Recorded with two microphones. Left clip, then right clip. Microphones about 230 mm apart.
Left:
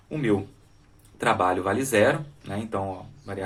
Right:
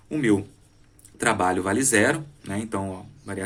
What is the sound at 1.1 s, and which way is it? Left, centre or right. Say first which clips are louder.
Speech: even; right.